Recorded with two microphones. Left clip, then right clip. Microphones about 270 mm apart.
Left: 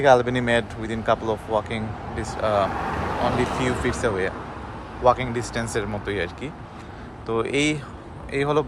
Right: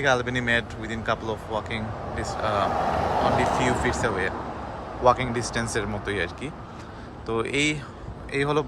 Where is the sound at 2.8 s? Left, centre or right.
Right.